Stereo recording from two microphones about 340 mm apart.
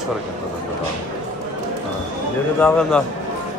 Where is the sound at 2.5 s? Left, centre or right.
Centre.